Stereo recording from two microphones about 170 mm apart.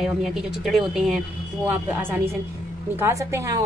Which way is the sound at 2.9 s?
15° right (ahead or behind).